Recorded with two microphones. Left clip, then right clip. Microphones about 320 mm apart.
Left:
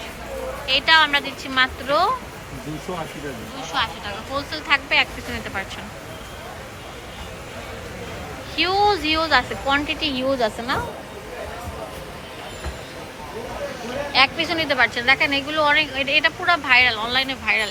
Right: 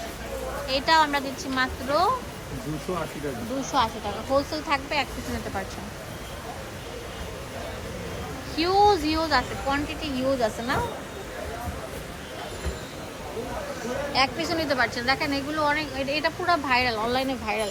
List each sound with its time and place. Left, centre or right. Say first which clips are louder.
0.7 s speech: left 5 dB; centre
3.6 s speech: left 1 dB; centre
8.6 s speech: left 1 dB; centre
14.2 s speech: left 7 dB; centre